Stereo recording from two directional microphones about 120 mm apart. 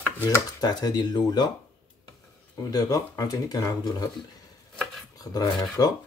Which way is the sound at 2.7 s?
30° left (ahead or behind).